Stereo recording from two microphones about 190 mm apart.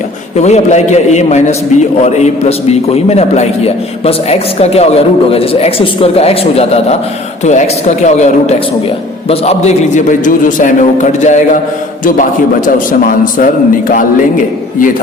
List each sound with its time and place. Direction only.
0.4 s a man's voice: 35° left (ahead or behind)